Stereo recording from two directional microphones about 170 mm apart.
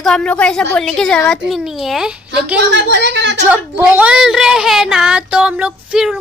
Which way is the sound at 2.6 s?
90° right.